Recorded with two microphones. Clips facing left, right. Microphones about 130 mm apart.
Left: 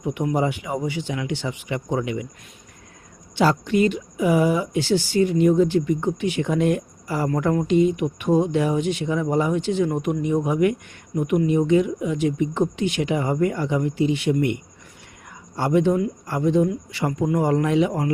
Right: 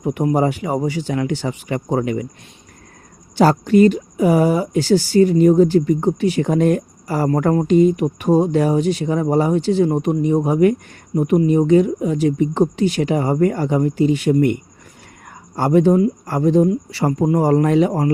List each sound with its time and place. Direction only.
0.0 s speech: 40° right (ahead or behind)
3.3 s speech: 40° right (ahead or behind)